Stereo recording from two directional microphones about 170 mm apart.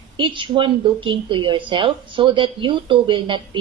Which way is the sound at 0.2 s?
30° right (ahead or behind).